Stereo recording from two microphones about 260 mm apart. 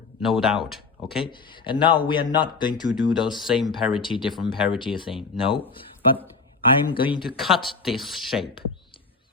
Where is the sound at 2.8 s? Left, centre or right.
Centre.